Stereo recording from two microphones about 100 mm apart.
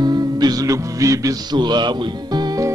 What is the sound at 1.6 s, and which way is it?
Speech, 45° right (ahead or behind).